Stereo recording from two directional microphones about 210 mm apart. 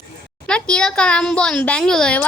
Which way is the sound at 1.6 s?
5° left (ahead or behind).